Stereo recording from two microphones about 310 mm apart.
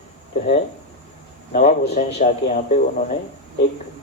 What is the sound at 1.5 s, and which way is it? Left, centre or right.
Speech, left.